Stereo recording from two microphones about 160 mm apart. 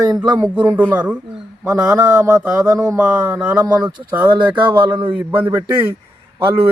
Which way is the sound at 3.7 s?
25° right (ahead or behind).